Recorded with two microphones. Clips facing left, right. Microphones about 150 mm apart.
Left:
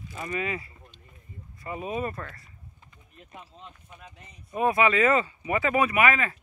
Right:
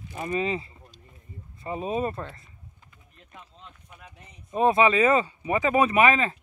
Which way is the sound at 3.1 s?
10° left (ahead or behind).